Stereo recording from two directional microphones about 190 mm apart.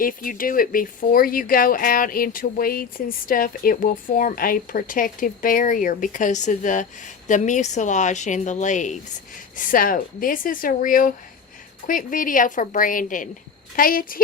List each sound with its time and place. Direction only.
0.0 s a woman's voice: 45° left (ahead or behind)